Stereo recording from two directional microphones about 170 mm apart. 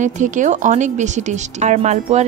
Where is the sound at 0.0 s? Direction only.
45° right (ahead or behind).